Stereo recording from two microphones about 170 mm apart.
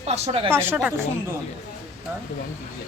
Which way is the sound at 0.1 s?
35° right (ahead or behind).